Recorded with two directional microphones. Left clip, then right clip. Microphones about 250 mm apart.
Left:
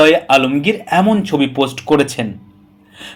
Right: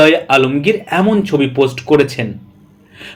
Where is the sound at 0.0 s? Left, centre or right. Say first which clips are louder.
Even; left.